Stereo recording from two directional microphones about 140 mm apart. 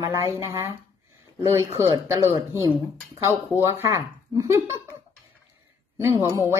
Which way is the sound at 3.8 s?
20° right (ahead or behind).